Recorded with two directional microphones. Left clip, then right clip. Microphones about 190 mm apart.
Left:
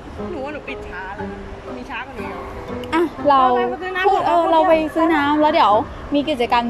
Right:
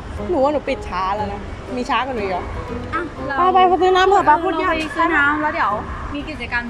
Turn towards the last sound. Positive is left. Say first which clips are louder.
# left 7 dB
turn(degrees=30)  # may be behind; listen again after turning